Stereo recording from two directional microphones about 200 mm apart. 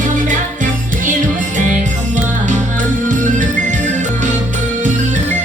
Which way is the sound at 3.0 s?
40° right (ahead or behind).